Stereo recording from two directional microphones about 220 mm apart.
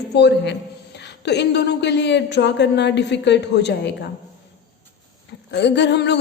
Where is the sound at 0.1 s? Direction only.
50° left (ahead or behind).